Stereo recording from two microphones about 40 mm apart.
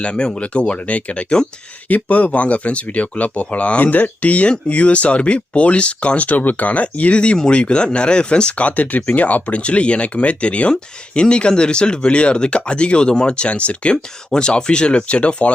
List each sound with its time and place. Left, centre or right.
0.0 s speech: left
1.9 s speech: left
13.9 s speech: left